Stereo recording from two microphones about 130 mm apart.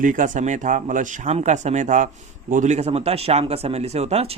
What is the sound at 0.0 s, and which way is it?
Speech, 85° right.